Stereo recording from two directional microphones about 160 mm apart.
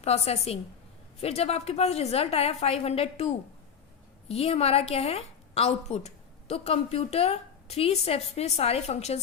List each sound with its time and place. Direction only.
0.0 s a woman's voice: 40° left (ahead or behind)